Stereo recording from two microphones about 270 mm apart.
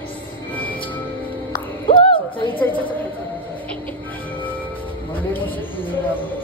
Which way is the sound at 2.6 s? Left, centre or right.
Centre.